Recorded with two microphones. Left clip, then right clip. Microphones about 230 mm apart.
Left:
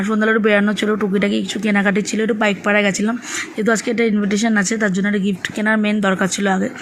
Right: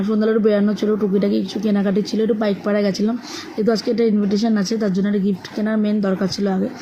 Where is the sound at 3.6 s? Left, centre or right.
Left.